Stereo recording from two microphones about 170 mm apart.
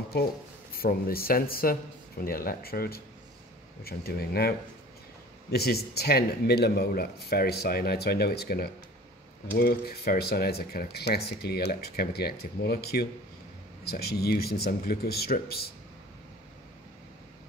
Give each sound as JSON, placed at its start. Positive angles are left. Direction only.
{"t": 0.7, "sound": "speech", "side_deg": 60}